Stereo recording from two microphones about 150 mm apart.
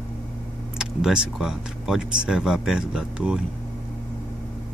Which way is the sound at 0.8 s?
5° right (ahead or behind).